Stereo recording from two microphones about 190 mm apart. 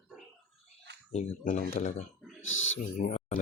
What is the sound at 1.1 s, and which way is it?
Speech, 35° left (ahead or behind).